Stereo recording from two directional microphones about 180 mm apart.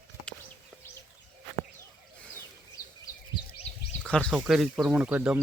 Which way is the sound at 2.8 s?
20° left (ahead or behind).